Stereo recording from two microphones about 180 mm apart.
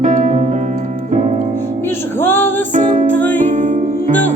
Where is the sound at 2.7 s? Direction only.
45° right (ahead or behind).